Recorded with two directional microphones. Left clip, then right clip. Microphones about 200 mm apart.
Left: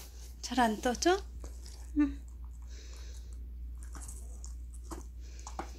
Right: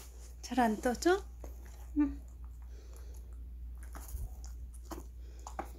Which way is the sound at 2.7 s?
5° right (ahead or behind).